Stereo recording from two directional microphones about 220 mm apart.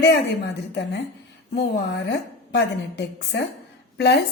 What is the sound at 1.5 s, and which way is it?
Speech, 50° left (ahead or behind).